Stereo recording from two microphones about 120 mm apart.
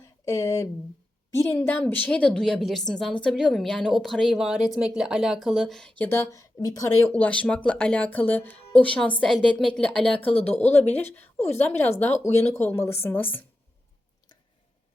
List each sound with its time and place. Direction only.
0.0 s a sound: 25° left (ahead or behind)
1.3 s a woman's voice: 20° left (ahead or behind); by 6.1 s 5° left (ahead or behind)
6.1 s speech: 20° left (ahead or behind)
7.1 s a woman's voice: 10° left (ahead or behind)
10.7 s a woman's voice: 15° left (ahead or behind)